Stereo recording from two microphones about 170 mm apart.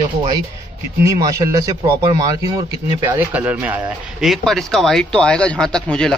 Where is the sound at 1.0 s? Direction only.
20° right (ahead or behind).